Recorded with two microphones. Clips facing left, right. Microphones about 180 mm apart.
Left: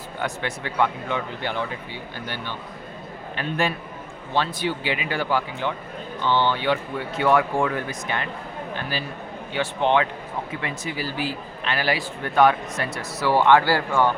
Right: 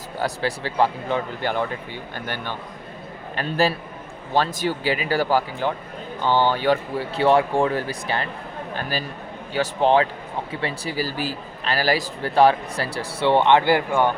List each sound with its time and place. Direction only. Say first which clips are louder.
0.2 s speech: right 4 dB; 35° right (ahead or behind)
3.3 s a man's voice: right 4 dB; 35° right (ahead or behind)
8.7 s a sound: right 2 dB; 40° right (ahead or behind)
9.5 s a man's voice: right 3 dB; 35° right (ahead or behind); by 14.1 s 20° right (ahead or behind)